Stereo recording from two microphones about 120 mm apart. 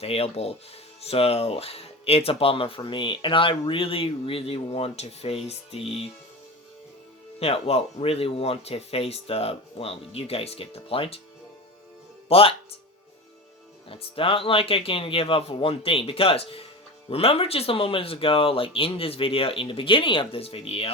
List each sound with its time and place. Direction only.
0.0 s speech: 55° left (ahead or behind)
7.3 s speech: 55° left (ahead or behind)
12.3 s speech: 50° left (ahead or behind)
13.8 s speech: 50° left (ahead or behind)